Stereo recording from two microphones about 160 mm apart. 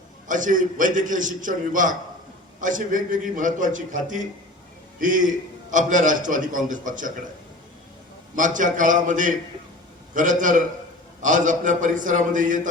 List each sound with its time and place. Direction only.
0.3 s a man's voice: 55° right (ahead or behind)
8.4 s a man's voice: 55° right (ahead or behind)